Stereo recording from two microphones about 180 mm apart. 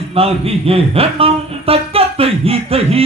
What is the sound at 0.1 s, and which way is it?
Speech, 35° right (ahead or behind).